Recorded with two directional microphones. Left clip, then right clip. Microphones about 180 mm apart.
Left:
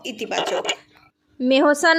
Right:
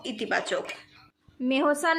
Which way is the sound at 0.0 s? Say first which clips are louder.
Left 2 dB; 20° right (ahead or behind).